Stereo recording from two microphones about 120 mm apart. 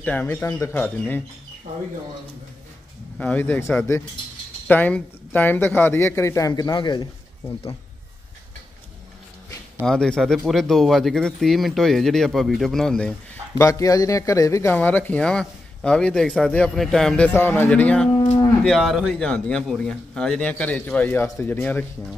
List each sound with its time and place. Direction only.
0.0 s a man's voice: 15° left (ahead or behind)
0.7 s a man's voice: 15° left (ahead or behind)
3.2 s a man's voice: 15° left (ahead or behind); by 7.1 s 35° left (ahead or behind)
9.8 s speech: 5° left (ahead or behind)
13.6 s a man's voice: 25° left (ahead or behind)
14.7 s a man's voice: 15° left (ahead or behind)
17.3 s a man's voice: 15° left (ahead or behind)